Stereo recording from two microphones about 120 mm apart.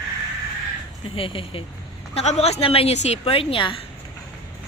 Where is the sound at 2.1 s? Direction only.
60° left (ahead or behind).